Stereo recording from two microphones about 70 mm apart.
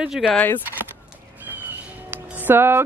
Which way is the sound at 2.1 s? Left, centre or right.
Right.